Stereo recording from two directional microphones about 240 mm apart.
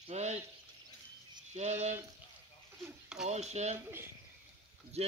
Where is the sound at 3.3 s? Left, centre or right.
Right.